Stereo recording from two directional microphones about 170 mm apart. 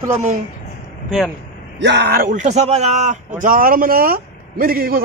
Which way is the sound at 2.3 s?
45° right (ahead or behind).